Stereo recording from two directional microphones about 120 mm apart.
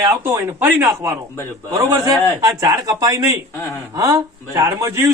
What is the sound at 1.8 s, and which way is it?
A man's voice, 30° right (ahead or behind).